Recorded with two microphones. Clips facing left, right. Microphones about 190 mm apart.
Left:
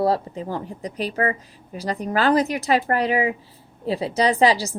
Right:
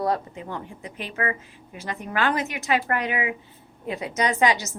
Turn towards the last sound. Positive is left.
turn(degrees=35)  # may be behind; listen again after turning